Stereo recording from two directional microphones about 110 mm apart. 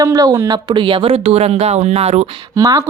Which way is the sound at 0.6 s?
50° right (ahead or behind).